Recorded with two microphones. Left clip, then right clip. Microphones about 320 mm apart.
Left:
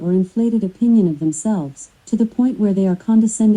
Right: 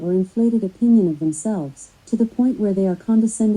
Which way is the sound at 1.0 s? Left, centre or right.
Left.